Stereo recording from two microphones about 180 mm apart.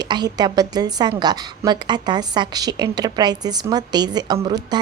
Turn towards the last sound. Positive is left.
turn(degrees=-25)  # may be behind; listen again after turning